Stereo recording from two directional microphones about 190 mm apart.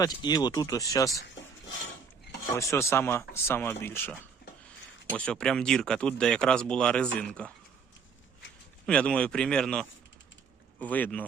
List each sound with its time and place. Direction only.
0.0 s speech: 20° left (ahead or behind)
2.6 s speech: 15° left (ahead or behind)
5.1 s speech: 5° left (ahead or behind)
8.9 s speech: 5° left (ahead or behind)